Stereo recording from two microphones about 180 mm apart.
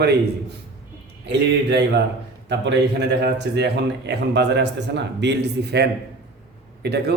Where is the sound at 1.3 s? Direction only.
70° right (ahead or behind).